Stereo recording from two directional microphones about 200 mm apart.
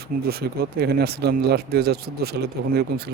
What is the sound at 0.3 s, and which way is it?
Speech, 50° right (ahead or behind).